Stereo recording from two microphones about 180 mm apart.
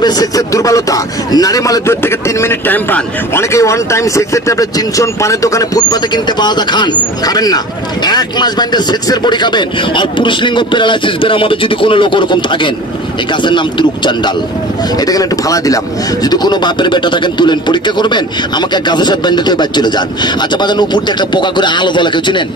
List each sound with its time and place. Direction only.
0.0 s a man's voice: 20° left (ahead or behind)